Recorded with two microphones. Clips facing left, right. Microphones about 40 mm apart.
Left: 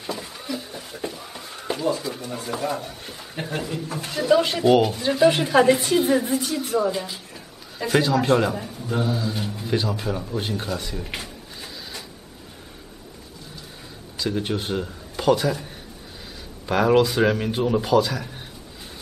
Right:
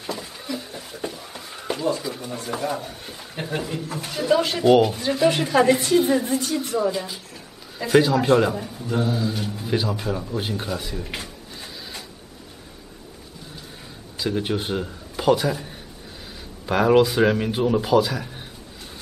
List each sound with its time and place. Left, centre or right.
0.0 s a sound: centre
2.4 s a man's voice: centre
14.1 s a man's voice: centre